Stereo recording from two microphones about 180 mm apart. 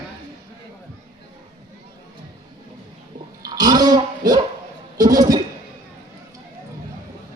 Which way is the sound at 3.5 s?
20° right (ahead or behind).